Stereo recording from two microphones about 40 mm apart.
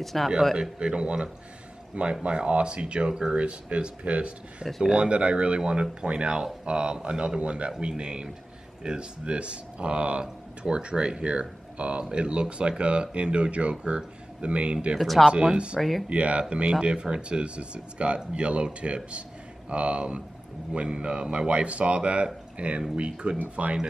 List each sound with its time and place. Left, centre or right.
0.0 s speech: centre
0.6 s speech: right
3.3 s speech: right
15.0 s speech: centre
15.2 s speech: right
15.8 s speech: centre
16.1 s speech: right